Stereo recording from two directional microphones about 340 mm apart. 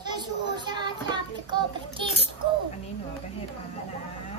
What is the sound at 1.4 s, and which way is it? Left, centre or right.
Child singing, centre.